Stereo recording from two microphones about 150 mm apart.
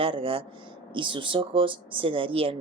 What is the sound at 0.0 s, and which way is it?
Speech, 35° right (ahead or behind).